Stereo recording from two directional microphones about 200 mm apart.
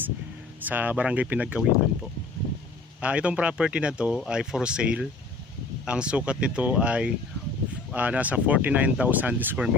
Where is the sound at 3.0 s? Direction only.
5° right (ahead or behind).